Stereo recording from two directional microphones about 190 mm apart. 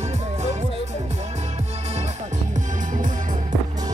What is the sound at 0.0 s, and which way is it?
Music, 35° right (ahead or behind).